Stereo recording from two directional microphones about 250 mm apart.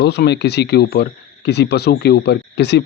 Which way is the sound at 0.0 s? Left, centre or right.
Left.